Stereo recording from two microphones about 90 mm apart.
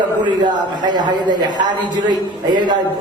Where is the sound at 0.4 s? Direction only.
55° right (ahead or behind).